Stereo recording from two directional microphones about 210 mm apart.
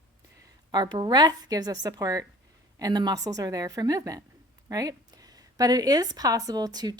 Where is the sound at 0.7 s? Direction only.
20° right (ahead or behind).